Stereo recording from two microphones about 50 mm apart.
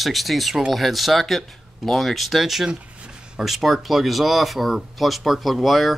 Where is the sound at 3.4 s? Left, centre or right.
Centre.